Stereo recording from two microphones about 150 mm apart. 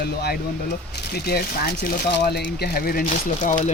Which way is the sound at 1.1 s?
90° left.